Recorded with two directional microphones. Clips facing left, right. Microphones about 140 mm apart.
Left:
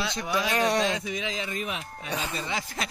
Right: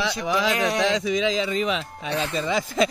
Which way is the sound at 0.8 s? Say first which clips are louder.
Right 6 dB; 90° right.